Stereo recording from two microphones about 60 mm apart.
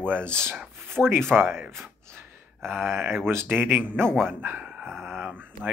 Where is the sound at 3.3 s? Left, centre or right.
Right.